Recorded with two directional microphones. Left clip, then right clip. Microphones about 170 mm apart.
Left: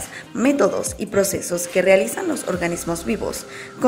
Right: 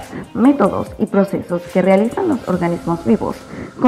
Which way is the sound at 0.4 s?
30° left (ahead or behind).